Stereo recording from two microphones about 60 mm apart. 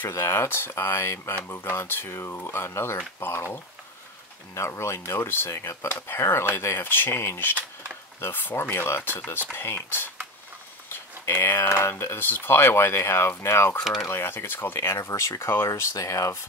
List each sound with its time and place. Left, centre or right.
0.1 s speech: left
4.6 s speech: left
5.9 s speech: left
10.9 s speech: left
14.8 s speech: left